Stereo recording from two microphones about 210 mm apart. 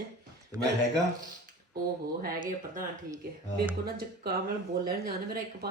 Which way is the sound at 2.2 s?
40° right (ahead or behind).